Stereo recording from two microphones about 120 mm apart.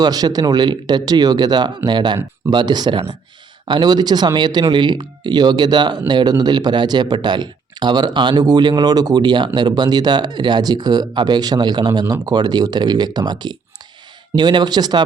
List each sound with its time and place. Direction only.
0.0 s speech: 35° right (ahead or behind)